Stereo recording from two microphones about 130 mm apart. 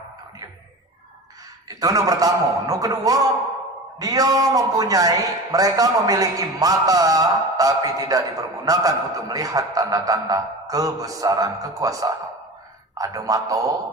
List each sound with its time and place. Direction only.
1.8 s a man's voice: 30° right (ahead or behind)